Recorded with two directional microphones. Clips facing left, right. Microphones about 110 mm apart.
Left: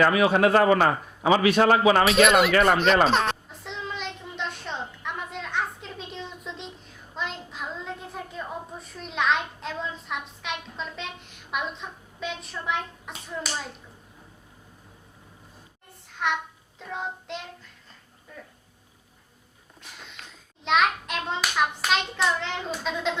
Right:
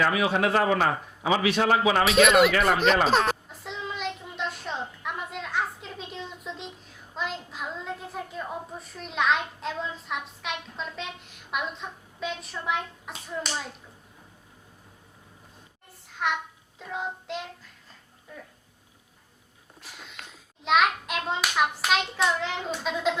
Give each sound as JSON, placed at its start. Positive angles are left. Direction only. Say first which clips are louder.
{"t": 0.0, "sound": "a man's voice", "louder": "left 4 dB", "side_deg": 55}
{"t": 2.0, "sound": "hands", "louder": "even", "side_deg": 0}
{"t": 2.5, "sound": "a man's voice", "louder": "left 3 dB", "side_deg": 50}
{"t": 2.7, "sound": "hands", "louder": "left 1 dB", "side_deg": 0}
{"t": 3.1, "sound": "a sound", "louder": "right 1 dB", "side_deg": 0}
{"t": 16.1, "sound": "child singing", "louder": "left 1 dB", "side_deg": 0}
{"t": 19.8, "sound": "a sound", "louder": "even", "side_deg": -5}
{"t": 20.7, "sound": "hands", "louder": "even", "side_deg": -5}